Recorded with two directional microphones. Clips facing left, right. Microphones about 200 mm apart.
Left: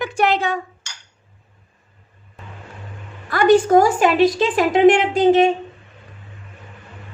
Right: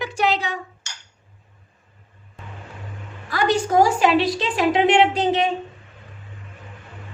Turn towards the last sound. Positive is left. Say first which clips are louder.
# left 6 dB
turn(degrees=50)  # may be behind; listen again after turning